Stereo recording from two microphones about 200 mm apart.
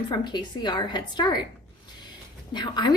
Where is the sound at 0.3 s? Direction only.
20° left (ahead or behind).